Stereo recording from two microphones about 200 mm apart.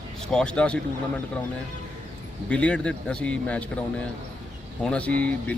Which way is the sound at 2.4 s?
5° left (ahead or behind).